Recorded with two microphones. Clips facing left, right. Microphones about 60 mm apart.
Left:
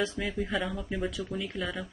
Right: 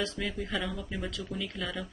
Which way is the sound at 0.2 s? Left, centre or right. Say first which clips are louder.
Left 2 dB; centre.